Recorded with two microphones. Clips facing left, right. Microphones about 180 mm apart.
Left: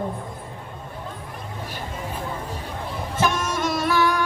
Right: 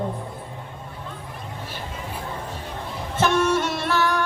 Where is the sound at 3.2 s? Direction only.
10° left (ahead or behind).